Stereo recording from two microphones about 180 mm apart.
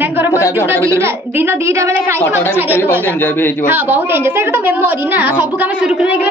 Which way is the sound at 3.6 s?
10° right (ahead or behind).